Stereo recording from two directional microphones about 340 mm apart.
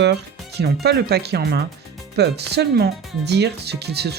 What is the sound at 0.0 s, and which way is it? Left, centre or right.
Speech, right.